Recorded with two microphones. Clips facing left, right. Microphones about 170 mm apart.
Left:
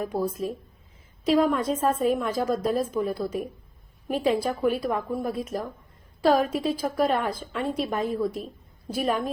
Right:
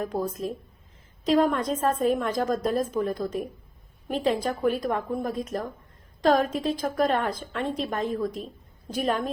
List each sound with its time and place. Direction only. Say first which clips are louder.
0.0 s a woman's voice: left 1 dB; 10° left (ahead or behind)